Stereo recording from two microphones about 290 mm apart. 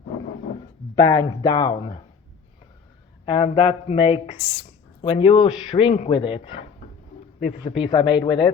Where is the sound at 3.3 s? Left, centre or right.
Centre.